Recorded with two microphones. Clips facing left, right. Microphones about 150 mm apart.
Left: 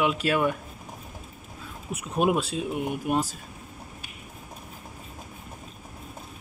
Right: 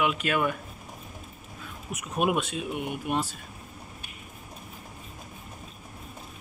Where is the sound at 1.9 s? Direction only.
30° left (ahead or behind).